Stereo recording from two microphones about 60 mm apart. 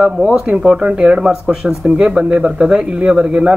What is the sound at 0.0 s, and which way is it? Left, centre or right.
Speech, centre.